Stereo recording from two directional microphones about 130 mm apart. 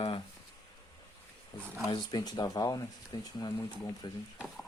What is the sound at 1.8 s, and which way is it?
Speech, 30° left (ahead or behind).